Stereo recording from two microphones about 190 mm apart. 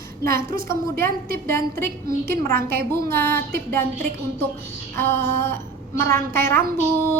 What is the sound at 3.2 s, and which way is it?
Speech, 50° right (ahead or behind).